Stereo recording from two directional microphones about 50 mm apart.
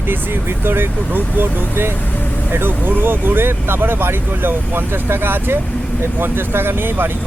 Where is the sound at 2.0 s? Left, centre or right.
Left.